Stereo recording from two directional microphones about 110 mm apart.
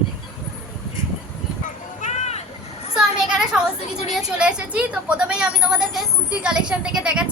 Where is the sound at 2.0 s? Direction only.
90° left.